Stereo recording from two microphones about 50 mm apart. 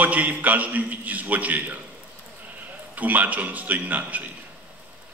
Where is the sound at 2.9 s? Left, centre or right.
Right.